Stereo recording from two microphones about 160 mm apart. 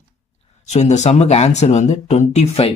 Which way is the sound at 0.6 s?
45° left (ahead or behind).